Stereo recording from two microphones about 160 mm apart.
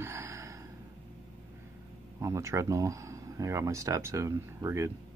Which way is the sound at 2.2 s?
20° right (ahead or behind).